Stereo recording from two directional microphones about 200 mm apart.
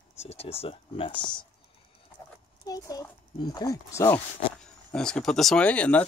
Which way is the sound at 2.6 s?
20° left (ahead or behind).